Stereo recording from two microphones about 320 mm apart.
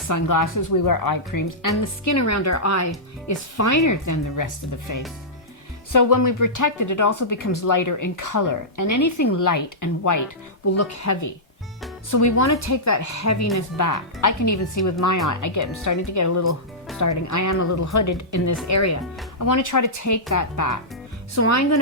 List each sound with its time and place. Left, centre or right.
0.1 s speech: left
2.0 s speech: left
10.8 s speech: left
13.6 s speech: left
19.4 s speech: left
21.3 s speech: left